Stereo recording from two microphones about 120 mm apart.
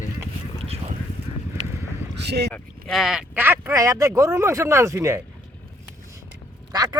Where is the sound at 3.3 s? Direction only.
20° right (ahead or behind).